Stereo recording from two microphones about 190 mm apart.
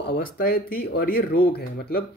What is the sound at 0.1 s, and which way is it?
Speech, 50° left (ahead or behind).